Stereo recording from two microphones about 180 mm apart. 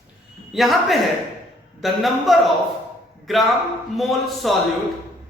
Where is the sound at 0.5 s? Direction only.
Centre (ahead or behind).